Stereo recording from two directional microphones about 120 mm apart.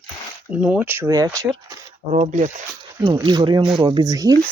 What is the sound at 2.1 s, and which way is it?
Speech, 75° right (ahead or behind).